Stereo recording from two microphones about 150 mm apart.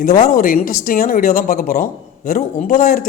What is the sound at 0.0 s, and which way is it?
Speech, 80° left.